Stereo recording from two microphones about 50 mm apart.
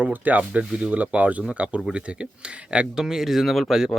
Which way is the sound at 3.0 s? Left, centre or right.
Centre.